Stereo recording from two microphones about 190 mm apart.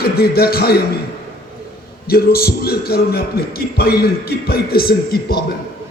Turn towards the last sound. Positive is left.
turn(degrees=55)  # may be behind; listen again after turning